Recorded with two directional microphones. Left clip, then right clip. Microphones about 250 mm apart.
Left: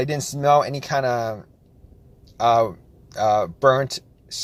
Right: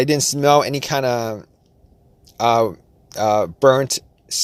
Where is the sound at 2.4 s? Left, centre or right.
Right.